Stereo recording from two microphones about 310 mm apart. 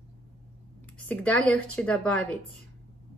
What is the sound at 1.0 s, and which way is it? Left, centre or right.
Speech, centre.